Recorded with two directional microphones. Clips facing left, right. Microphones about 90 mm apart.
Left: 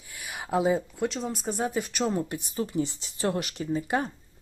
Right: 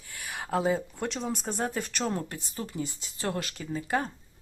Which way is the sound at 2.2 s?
20° left (ahead or behind).